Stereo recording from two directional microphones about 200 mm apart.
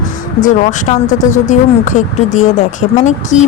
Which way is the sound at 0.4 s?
40° left (ahead or behind).